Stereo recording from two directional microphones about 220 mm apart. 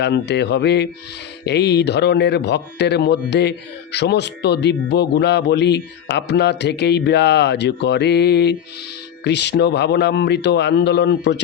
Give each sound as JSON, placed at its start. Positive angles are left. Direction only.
{"t": 0.0, "sound": "speech", "side_deg": 50}